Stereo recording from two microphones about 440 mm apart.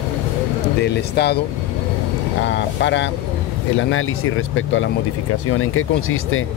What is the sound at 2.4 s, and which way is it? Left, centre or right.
Speech, left.